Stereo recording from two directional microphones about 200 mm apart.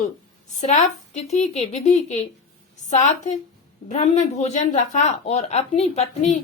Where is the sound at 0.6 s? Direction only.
35° left (ahead or behind).